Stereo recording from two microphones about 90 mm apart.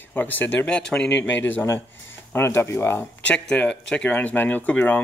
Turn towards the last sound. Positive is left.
turn(degrees=20)  # may be behind; listen again after turning